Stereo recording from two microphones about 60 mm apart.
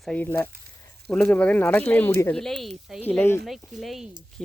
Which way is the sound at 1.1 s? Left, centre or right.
Left.